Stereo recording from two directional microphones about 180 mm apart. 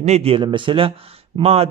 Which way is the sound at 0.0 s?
35° right (ahead or behind).